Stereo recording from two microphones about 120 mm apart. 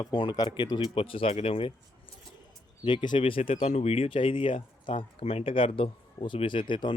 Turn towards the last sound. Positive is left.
turn(degrees=45)  # may be behind; listen again after turning